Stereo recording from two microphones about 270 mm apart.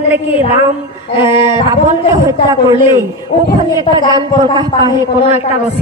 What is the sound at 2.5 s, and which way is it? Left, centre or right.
Speech, centre.